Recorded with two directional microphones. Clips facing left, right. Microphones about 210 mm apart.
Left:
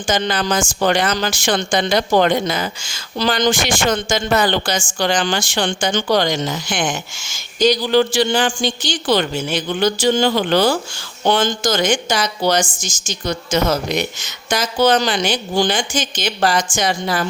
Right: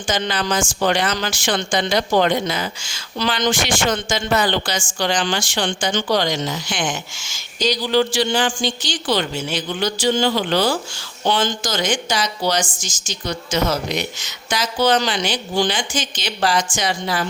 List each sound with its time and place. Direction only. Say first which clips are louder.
0.1 s speech: left 3 dB; 45° left (ahead or behind)